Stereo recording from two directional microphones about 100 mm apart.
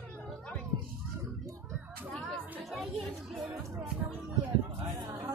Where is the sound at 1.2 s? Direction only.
35° right (ahead or behind).